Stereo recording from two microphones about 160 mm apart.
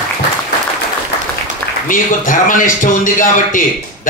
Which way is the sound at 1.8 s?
55° left (ahead or behind).